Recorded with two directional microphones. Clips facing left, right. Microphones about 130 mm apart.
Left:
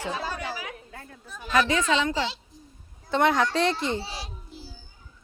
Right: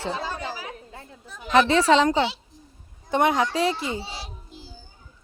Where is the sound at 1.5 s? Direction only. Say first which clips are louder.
Right 6 dB; 30° right (ahead or behind).